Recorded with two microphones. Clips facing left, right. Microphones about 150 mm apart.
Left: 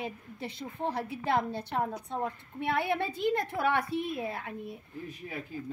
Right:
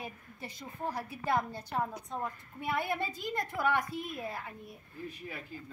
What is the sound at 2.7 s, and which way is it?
A woman's voice, 70° left (ahead or behind).